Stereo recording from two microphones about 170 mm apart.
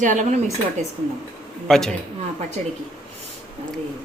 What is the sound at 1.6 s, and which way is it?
Speech, 5° left (ahead or behind).